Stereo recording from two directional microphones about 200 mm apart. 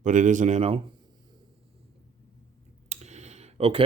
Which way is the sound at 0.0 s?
40° right (ahead or behind).